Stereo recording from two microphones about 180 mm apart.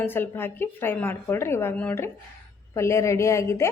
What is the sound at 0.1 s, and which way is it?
A woman's voice, 10° left (ahead or behind).